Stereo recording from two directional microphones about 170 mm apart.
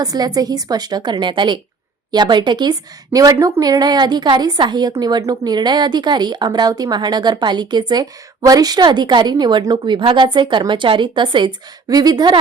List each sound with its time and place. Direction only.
0.0 s a woman's voice: 20° right (ahead or behind)